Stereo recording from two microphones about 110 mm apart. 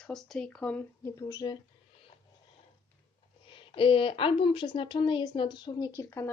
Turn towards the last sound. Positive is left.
turn(degrees=25)  # may be behind; listen again after turning